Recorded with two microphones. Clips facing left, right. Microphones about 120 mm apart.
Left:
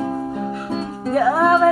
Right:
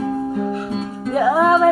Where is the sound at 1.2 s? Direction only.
15° right (ahead or behind).